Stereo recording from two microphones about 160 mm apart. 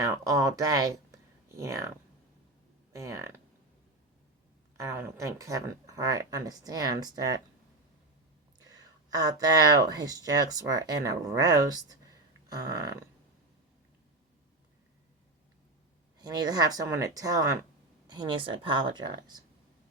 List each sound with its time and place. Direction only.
0.0 s speech: 20° right (ahead or behind)
2.9 s speech: 20° right (ahead or behind)
4.8 s speech: 20° right (ahead or behind)
8.5 s speech: 25° right (ahead or behind)
16.1 s speech: 25° right (ahead or behind)